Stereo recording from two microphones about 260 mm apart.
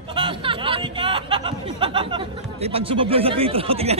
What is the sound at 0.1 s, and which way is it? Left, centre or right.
Speech, centre.